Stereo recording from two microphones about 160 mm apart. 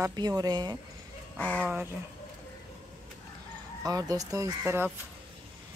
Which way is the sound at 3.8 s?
25° right (ahead or behind).